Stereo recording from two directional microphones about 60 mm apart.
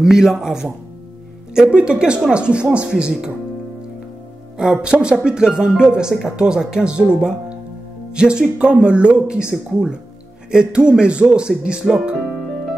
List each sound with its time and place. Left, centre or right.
0.0 s speech: centre
4.6 s speech: centre